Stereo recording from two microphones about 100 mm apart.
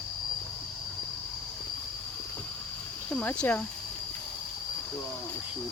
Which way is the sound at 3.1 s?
15° left (ahead or behind).